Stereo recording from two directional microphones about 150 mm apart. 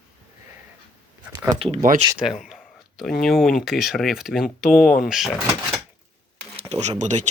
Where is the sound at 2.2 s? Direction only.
5° right (ahead or behind).